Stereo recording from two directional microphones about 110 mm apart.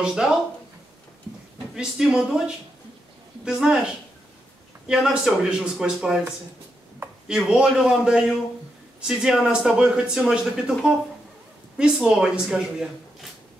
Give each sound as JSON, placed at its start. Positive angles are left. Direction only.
{"t": 0.0, "sound": "speech", "side_deg": -5}
{"t": 1.8, "sound": "speech", "side_deg": -5}